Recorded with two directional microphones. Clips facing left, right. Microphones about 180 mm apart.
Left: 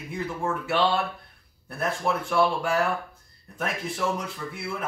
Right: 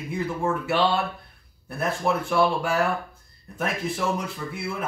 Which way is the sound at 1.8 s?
5° right (ahead or behind).